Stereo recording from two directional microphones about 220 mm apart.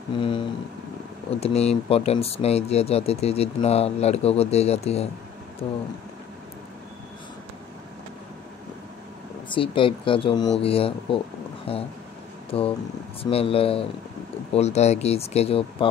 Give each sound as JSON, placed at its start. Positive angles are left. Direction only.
{"t": 0.2, "sound": "speech", "side_deg": 20}
{"t": 9.5, "sound": "speech", "side_deg": 25}